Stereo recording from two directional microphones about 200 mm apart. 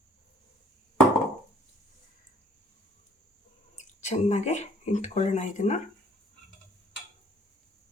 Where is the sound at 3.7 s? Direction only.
35° left (ahead or behind).